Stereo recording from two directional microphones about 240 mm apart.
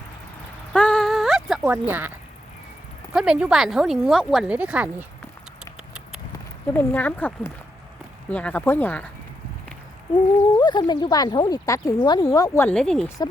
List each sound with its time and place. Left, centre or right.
0.7 s a sound: centre
1.9 s speech: centre
6.7 s speech: centre
10.6 s speech: centre